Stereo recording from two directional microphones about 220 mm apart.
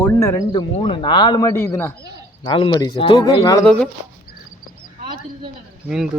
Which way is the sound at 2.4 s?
20° left (ahead or behind).